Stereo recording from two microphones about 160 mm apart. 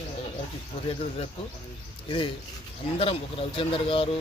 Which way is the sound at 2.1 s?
35° left (ahead or behind).